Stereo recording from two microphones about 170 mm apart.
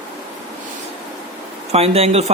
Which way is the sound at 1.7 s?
35° right (ahead or behind).